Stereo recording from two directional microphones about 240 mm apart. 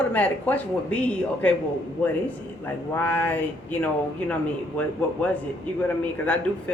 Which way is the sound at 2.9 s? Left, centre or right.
Centre.